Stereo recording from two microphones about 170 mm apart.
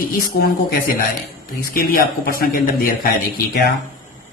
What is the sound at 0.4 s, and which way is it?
Speech, 70° left (ahead or behind).